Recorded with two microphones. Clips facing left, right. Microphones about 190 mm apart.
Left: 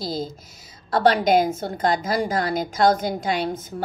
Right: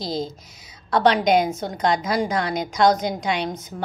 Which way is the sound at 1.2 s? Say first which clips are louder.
Even; 5° left (ahead or behind).